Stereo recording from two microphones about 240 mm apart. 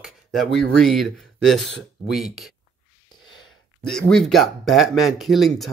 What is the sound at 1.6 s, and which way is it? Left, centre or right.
Speech, left.